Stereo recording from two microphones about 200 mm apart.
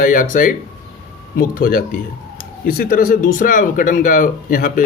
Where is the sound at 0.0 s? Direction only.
40° left (ahead or behind).